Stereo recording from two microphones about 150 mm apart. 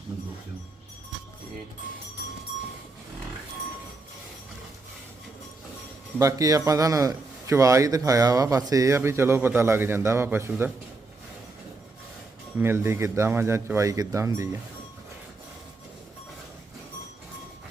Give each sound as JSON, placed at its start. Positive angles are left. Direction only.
{"t": 6.1, "sound": "a man's voice", "side_deg": -20}
{"t": 12.5, "sound": "speech", "side_deg": -15}